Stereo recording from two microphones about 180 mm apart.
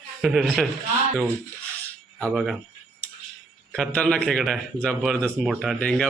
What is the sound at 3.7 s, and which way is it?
A man's voice, 5° left (ahead or behind).